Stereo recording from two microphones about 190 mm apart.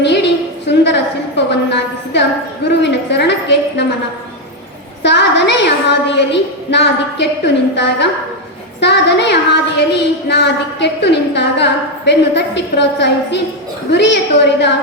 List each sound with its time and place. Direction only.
0.0 s a sound: 65° left (ahead or behind)
2.6 s a woman's voice: 65° left (ahead or behind)
5.0 s a woman's voice: 65° left (ahead or behind)